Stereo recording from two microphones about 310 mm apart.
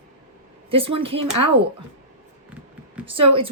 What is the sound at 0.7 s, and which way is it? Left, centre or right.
Speech, centre.